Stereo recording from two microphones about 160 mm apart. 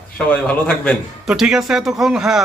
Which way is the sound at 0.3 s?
5° left (ahead or behind).